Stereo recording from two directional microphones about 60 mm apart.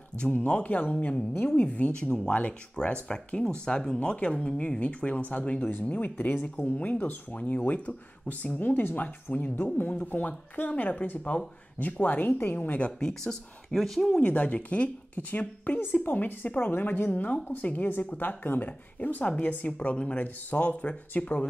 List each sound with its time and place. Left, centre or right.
0.2 s speech: left
13.0 s speech: centre
14.2 s a woman's voice: left